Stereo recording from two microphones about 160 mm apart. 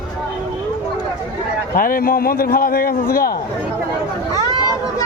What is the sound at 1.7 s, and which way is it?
A man's voice, 60° left (ahead or behind).